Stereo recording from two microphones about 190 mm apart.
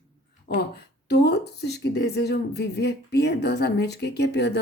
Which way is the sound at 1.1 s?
60° left (ahead or behind).